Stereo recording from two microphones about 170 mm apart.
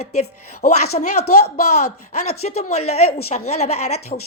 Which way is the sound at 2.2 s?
40° left (ahead or behind).